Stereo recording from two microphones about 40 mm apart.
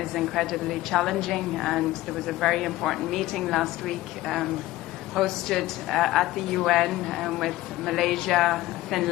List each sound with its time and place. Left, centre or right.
0.0 s a woman's voice: centre